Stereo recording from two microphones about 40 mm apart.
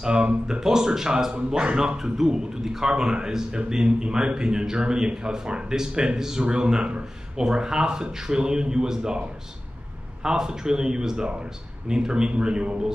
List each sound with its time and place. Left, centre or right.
0.0 s speech: right
2.1 s speech: centre
10.2 s speech: centre